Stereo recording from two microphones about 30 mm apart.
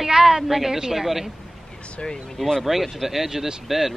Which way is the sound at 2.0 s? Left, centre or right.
Left.